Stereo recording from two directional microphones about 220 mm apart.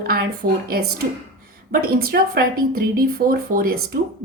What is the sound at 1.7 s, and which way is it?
Speech, 40° right (ahead or behind).